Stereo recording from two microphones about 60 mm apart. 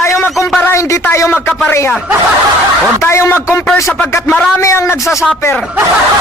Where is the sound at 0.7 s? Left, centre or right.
Left.